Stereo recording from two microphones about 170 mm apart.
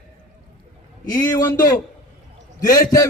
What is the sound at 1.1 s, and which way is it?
Speech, 20° left (ahead or behind).